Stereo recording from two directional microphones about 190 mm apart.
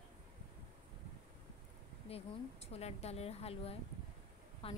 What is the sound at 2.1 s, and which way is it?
A woman's voice, 35° left (ahead or behind).